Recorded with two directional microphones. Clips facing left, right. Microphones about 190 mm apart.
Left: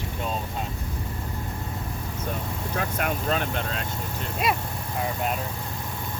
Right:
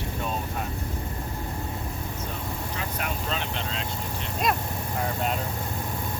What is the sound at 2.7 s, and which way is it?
Speech, 55° left (ahead or behind).